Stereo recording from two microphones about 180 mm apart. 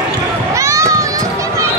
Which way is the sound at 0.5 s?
15° right (ahead or behind).